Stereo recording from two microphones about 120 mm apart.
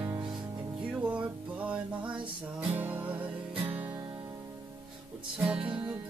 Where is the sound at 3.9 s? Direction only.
35° right (ahead or behind).